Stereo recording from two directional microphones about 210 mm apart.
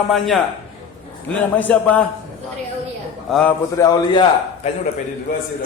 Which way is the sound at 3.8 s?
20° left (ahead or behind).